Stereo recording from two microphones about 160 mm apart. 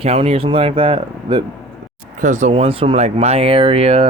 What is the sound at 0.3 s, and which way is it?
Speech, 35° right (ahead or behind).